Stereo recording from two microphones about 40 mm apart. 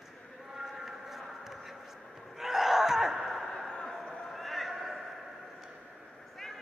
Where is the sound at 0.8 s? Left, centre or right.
Centre.